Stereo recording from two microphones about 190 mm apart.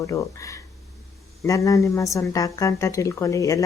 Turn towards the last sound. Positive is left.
turn(degrees=15)  # may be behind; listen again after turning